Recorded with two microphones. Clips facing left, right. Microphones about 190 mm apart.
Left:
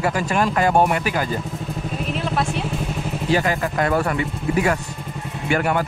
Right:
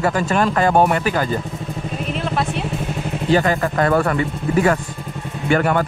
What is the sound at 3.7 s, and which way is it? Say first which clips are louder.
Speech: right 3 dB; 45° right (ahead or behind).